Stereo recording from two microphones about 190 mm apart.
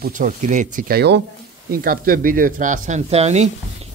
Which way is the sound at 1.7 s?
50° right (ahead or behind).